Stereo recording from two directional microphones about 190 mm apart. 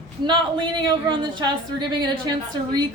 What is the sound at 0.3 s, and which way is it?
A woman's voice, 25° right (ahead or behind).